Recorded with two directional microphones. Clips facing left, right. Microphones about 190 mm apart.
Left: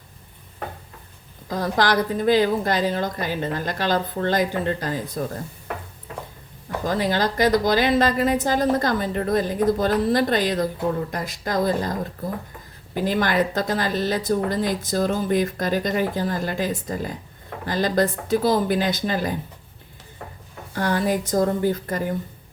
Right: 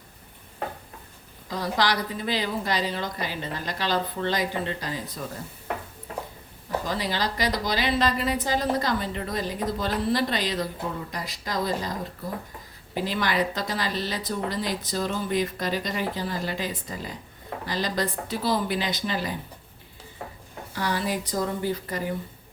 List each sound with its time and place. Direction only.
1.5 s a woman's voice: 50° left (ahead or behind)
6.8 s a woman's voice: 50° left (ahead or behind)
13.0 s a woman's voice: 50° left (ahead or behind)
20.7 s a woman's voice: 50° left (ahead or behind)